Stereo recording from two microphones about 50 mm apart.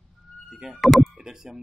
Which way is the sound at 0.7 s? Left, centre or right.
Centre.